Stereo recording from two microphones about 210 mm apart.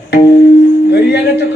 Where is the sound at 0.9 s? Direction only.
50° left (ahead or behind).